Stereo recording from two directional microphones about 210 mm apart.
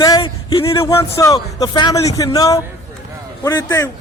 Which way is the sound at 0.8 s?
15° left (ahead or behind).